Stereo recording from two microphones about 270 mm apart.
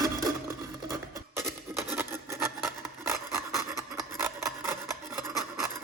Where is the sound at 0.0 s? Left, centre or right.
Centre.